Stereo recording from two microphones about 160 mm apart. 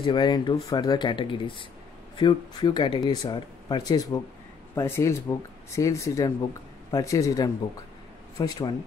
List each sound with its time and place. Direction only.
0.0 s speech: 30° left (ahead or behind)